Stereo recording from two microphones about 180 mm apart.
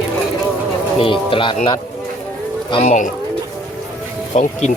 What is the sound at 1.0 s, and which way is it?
Insect, 30° left (ahead or behind).